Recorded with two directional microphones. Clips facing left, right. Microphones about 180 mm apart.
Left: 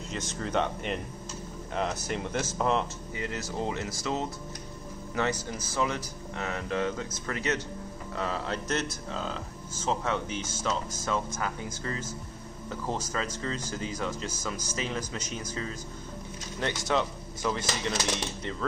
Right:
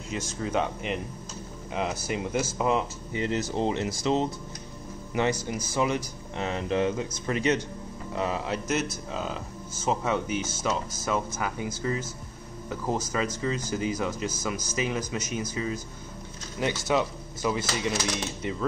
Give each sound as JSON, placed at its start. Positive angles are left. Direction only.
{"t": 0.1, "sound": "speech", "side_deg": -5}
{"t": 3.1, "sound": "speech", "side_deg": -25}